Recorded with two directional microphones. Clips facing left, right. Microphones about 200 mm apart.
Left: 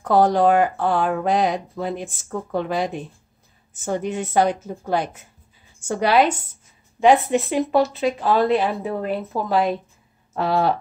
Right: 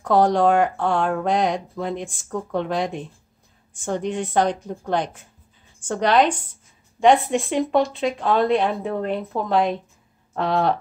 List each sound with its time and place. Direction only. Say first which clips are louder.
0.0 s speech: left 1 dB; centre (ahead or behind)